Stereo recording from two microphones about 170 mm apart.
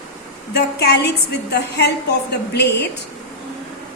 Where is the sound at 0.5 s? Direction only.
70° left (ahead or behind).